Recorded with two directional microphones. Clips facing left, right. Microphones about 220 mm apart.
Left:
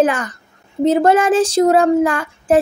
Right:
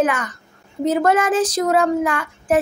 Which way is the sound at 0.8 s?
30° left (ahead or behind).